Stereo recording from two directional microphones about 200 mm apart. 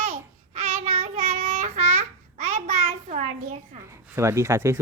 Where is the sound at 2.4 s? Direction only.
35° right (ahead or behind).